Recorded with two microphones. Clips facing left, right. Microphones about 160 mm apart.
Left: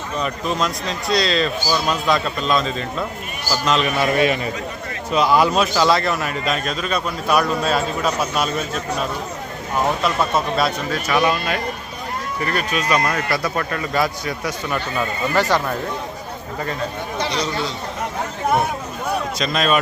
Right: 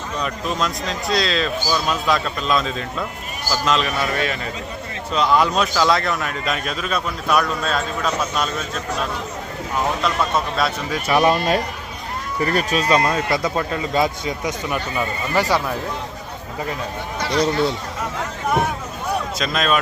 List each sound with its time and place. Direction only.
0.2 s a man's voice: centre (ahead or behind)
4.0 s a man's voice: 15° left (ahead or behind)
10.0 s a man's voice: centre (ahead or behind)
11.2 s speech: 40° right (ahead or behind); by 15.7 s 10° right (ahead or behind)
17.3 s a man's voice: 55° right (ahead or behind)
19.4 s a man's voice: centre (ahead or behind)